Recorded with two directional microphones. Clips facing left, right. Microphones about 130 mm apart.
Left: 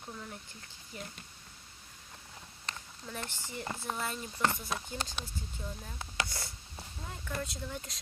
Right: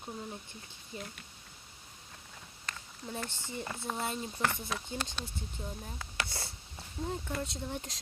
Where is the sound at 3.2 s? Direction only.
25° right (ahead or behind).